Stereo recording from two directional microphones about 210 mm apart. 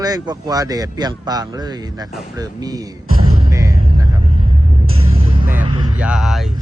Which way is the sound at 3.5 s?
15° right (ahead or behind).